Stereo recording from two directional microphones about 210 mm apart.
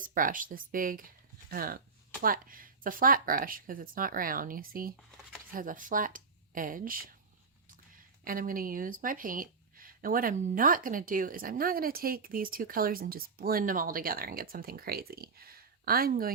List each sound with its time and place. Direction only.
0.0 s speech: 40° right (ahead or behind)
8.2 s speech: 40° right (ahead or behind)